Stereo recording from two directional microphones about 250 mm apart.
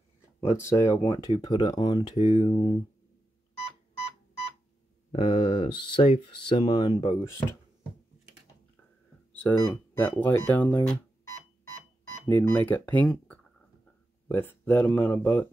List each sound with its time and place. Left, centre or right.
0.4 s speech: centre
5.1 s speech: left
9.3 s speech: centre
12.3 s speech: centre